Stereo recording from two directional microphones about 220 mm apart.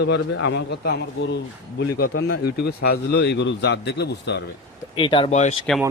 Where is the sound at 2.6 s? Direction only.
50° left (ahead or behind).